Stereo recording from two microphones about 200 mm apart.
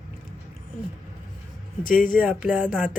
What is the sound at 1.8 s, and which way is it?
Speech, 45° left (ahead or behind).